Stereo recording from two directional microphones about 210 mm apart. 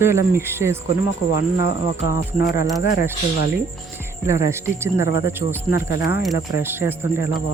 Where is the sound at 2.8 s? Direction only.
50° left (ahead or behind).